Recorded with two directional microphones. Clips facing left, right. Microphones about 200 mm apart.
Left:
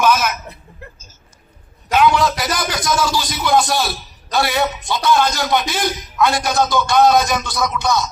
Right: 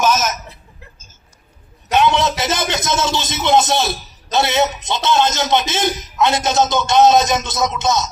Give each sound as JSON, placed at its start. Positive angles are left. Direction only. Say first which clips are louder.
{"t": 0.0, "sound": "speech", "louder": "left 1 dB", "side_deg": -40}
{"t": 1.9, "sound": "a man's voice", "louder": "left 1 dB", "side_deg": -25}